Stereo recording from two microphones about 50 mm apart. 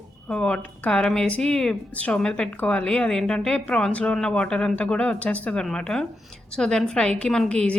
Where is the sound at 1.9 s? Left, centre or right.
Left.